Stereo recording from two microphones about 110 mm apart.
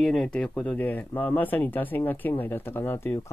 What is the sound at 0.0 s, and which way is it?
Speech, 5° left (ahead or behind).